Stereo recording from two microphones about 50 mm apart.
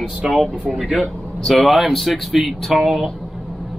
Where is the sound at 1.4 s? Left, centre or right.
Centre.